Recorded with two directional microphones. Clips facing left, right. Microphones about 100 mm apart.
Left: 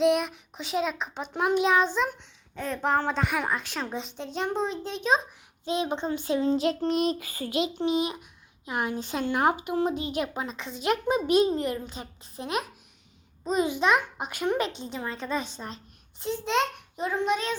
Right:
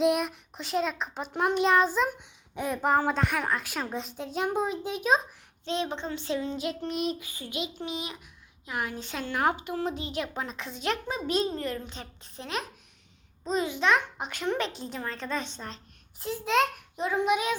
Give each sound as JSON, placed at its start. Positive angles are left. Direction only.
{"t": 0.0, "sound": "a child's voice", "side_deg": 0}
{"t": 5.6, "sound": "speech", "side_deg": 10}
{"t": 6.4, "sound": "child singing", "side_deg": 35}
{"t": 7.2, "sound": "a child's voice", "side_deg": 45}
{"t": 7.8, "sound": "a woman's voice", "side_deg": 25}
{"t": 10.3, "sound": "speech", "side_deg": 0}
{"t": 14.7, "sound": "a child's voice", "side_deg": 0}